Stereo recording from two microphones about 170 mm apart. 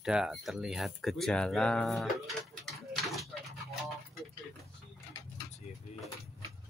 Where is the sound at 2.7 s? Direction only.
Centre (ahead or behind).